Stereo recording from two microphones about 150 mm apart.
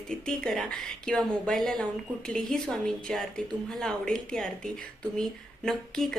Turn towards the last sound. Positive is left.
turn(degrees=5)  # may be behind; listen again after turning